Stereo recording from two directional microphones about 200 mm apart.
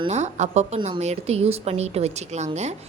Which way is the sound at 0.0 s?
35° right (ahead or behind).